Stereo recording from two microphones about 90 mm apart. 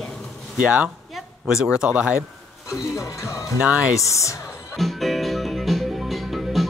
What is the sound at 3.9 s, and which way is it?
Speech, 35° left (ahead or behind).